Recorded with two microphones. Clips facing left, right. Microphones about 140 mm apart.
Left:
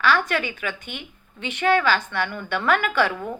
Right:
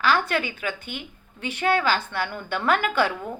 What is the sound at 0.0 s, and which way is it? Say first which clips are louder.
Speech: left 1 dB; 35° right (ahead or behind).